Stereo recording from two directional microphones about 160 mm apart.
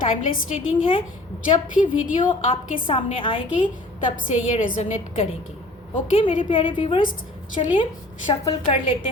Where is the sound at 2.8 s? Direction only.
30° left (ahead or behind).